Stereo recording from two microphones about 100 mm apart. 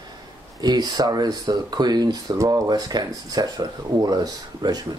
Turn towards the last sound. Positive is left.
turn(degrees=-40)  # may be behind; listen again after turning